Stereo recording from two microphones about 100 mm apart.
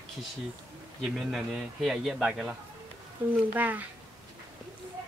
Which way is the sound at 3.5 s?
15° right (ahead or behind).